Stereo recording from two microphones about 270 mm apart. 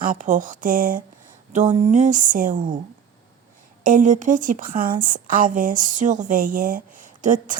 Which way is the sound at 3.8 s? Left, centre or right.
Right.